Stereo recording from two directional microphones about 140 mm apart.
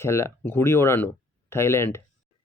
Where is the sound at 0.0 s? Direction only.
20° left (ahead or behind).